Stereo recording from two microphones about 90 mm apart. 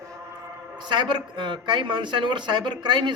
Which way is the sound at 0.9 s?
55° right (ahead or behind).